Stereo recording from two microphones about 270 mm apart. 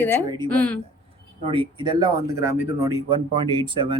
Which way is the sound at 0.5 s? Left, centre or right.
Centre.